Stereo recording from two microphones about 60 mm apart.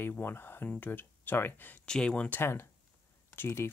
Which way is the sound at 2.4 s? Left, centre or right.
Left.